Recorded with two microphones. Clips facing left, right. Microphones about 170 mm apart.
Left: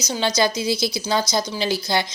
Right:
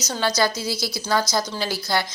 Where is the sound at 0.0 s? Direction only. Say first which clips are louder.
Left 1 dB; 15° left (ahead or behind).